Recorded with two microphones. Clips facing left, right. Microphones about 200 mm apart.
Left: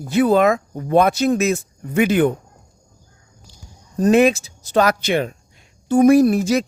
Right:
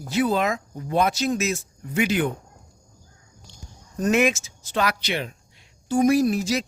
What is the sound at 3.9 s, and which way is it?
A woman's voice, 35° left (ahead or behind).